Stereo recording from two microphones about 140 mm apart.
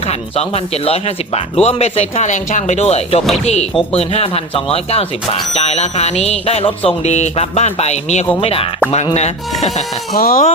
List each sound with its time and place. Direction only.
0.0 s speech: 45° left (ahead or behind)
10.2 s speech: 90° left